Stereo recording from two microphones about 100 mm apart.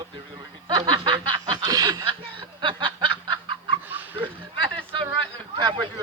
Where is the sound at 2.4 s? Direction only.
55° right (ahead or behind).